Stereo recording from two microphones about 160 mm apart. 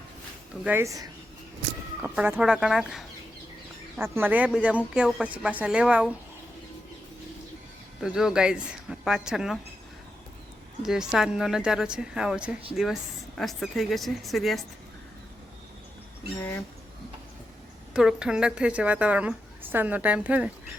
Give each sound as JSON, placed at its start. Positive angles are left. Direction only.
{"t": 0.6, "sound": "a woman's voice", "side_deg": -15}
{"t": 2.0, "sound": "speech", "side_deg": -10}
{"t": 3.9, "sound": "a woman's voice", "side_deg": -15}
{"t": 8.0, "sound": "speech", "side_deg": -5}
{"t": 10.8, "sound": "speech", "side_deg": -5}
{"t": 17.9, "sound": "a woman's voice", "side_deg": -5}